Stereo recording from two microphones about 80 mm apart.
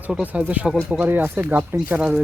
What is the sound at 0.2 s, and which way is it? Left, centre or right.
Speech, centre.